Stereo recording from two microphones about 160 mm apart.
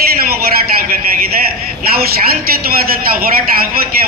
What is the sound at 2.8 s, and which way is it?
Speech, 65° right (ahead or behind).